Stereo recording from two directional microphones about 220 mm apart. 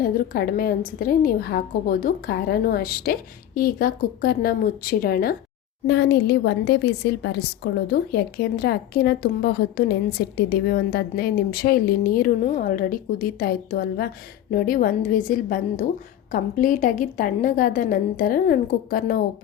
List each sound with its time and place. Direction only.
0.0 s a woman's voice: 40° left (ahead or behind)